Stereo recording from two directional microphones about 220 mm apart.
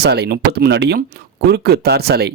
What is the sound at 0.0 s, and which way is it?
Speech, 50° right (ahead or behind).